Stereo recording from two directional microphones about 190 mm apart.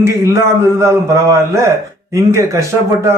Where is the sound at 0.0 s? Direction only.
15° right (ahead or behind).